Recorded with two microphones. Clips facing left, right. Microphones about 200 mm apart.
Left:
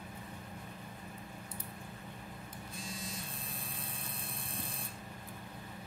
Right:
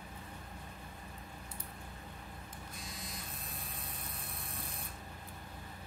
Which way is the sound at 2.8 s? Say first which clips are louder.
Left 6 dB; 30° left (ahead or behind).